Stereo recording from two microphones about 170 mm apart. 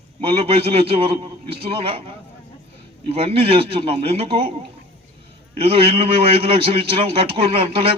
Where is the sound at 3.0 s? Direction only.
35° right (ahead or behind).